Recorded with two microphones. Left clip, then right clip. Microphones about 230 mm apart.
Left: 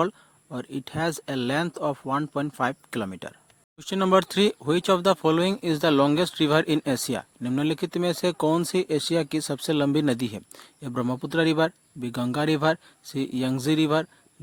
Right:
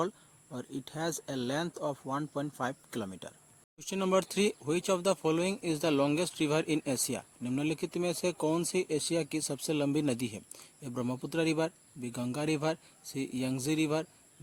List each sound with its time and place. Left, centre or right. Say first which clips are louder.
0.5 s speech: left 8 dB; left